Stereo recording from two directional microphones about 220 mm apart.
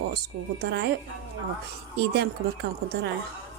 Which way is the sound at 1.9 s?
50° right (ahead or behind).